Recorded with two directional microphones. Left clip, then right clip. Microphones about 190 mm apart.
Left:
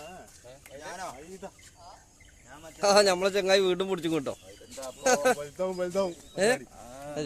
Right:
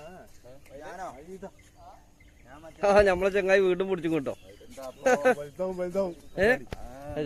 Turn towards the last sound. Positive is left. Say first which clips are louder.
# left 1 dB
turn(degrees=35)  # may be behind; listen again after turning